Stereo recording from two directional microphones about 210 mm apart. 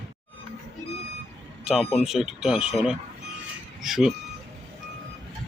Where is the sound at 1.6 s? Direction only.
5° right (ahead or behind).